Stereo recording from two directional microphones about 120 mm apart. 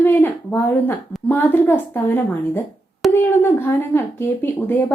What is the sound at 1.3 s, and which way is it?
A woman's voice, 20° left (ahead or behind).